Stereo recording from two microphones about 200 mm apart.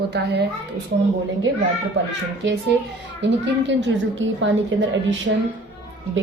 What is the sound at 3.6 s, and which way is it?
A woman's voice, 65° right (ahead or behind).